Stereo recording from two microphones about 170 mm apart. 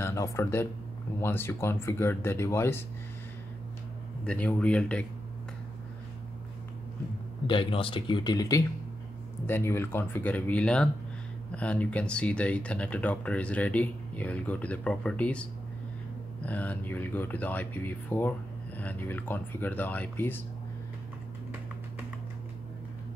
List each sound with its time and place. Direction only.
0.0 s speech: 15° left (ahead or behind)
4.3 s speech: 5° left (ahead or behind)
7.4 s speech: 30° left (ahead or behind); by 15.4 s 5° left (ahead or behind)
16.4 s speech: 10° left (ahead or behind)